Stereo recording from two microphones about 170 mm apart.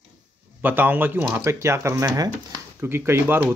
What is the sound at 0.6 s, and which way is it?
Speech, 10° right (ahead or behind).